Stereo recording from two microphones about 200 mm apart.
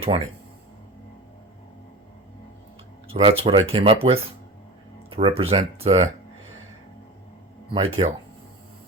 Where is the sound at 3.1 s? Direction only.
25° right (ahead or behind).